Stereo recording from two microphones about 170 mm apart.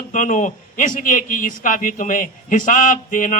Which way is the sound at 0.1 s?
45° left (ahead or behind).